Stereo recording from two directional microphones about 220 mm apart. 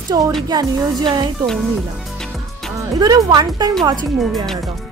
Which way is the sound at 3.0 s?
20° right (ahead or behind).